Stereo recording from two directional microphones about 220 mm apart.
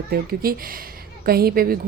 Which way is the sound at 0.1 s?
45° right (ahead or behind).